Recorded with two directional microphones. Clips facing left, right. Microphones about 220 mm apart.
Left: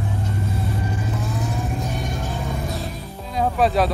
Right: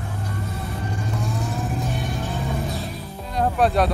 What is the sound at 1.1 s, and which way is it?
Vehicle, centre (ahead or behind).